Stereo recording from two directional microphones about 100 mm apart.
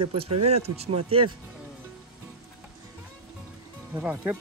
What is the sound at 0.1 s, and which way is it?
Speech, 80° right.